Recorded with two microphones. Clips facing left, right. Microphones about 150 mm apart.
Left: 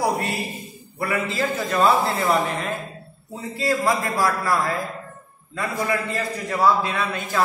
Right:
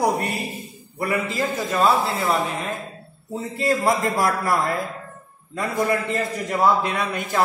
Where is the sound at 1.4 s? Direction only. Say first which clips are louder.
Even; 10° right (ahead or behind).